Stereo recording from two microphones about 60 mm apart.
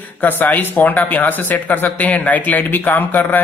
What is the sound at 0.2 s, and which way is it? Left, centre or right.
Speech, left.